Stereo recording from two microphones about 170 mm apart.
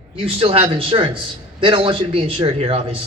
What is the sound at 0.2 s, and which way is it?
A man's voice, 35° right (ahead or behind).